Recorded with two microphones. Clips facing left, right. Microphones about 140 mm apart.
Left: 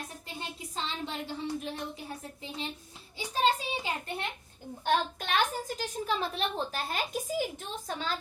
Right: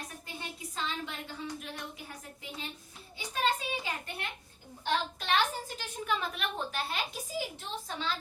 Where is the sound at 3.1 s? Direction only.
25° left (ahead or behind).